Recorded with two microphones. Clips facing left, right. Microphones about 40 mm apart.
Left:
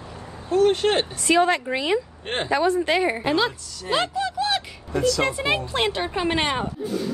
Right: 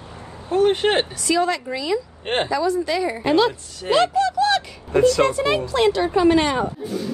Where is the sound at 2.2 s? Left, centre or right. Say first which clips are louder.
Right 5 dB; right.